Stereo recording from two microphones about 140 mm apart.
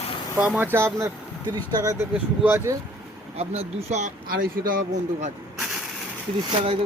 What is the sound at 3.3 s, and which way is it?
Speech, 50° right (ahead or behind).